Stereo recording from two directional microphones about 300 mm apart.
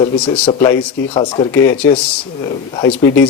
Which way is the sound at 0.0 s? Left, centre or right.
Centre.